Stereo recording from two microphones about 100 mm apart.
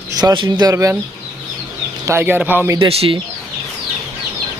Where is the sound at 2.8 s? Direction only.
70° right (ahead or behind).